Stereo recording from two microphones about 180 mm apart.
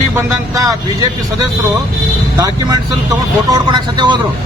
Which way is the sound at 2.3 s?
20° right (ahead or behind).